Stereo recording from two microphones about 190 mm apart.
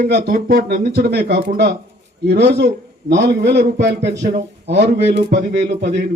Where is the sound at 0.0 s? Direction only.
45° right (ahead or behind).